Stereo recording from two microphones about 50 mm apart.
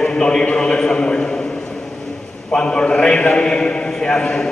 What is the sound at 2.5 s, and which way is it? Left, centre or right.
A man's voice, centre.